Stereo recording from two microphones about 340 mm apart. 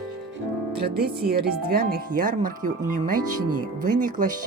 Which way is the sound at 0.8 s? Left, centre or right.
Right.